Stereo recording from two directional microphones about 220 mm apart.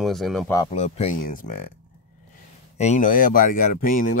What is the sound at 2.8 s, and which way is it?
Speech, 30° left (ahead or behind).